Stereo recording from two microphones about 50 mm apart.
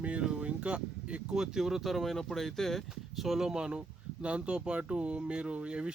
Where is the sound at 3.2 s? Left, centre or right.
Centre.